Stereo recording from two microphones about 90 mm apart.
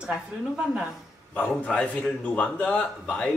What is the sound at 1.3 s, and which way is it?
A man's voice, 15° left (ahead or behind).